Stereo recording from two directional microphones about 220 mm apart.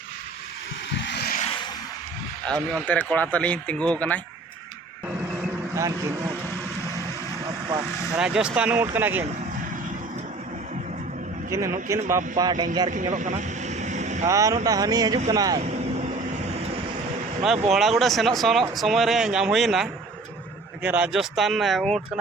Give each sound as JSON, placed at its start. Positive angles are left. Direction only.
{"t": 0.9, "sound": "vehicle", "side_deg": 50}
{"t": 2.5, "sound": "speech", "side_deg": 5}
{"t": 5.7, "sound": "speech", "side_deg": -15}
{"t": 8.1, "sound": "speech", "side_deg": -5}
{"t": 11.4, "sound": "speech", "side_deg": -15}
{"t": 12.9, "sound": "vehicle", "side_deg": -35}
{"t": 14.3, "sound": "speech", "side_deg": -15}
{"t": 17.7, "sound": "speech", "side_deg": 0}